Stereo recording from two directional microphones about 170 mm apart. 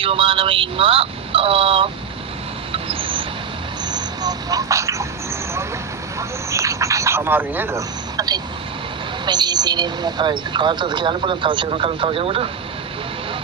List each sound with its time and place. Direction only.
0.0 s speech: 30° right (ahead or behind)
2.7 s a sound: 30° right (ahead or behind)
3.9 s speech: 25° right (ahead or behind)
6.1 s a woman's voice: 20° right (ahead or behind)